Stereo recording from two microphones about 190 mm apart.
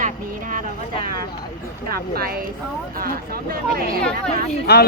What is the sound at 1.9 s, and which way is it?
Speech, 55° right (ahead or behind).